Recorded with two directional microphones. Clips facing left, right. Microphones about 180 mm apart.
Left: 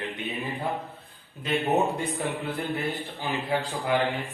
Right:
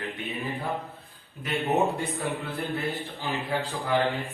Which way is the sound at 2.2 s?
15° left (ahead or behind).